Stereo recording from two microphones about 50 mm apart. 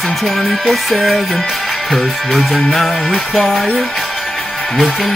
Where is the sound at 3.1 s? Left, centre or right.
Centre.